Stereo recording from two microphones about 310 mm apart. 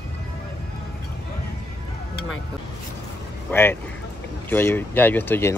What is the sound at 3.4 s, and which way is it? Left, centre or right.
Speech, centre.